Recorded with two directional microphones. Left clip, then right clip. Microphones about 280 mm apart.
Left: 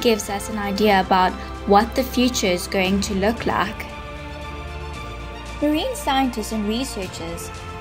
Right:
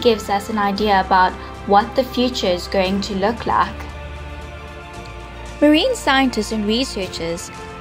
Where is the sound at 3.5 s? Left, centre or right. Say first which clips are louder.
Right 7 dB; left.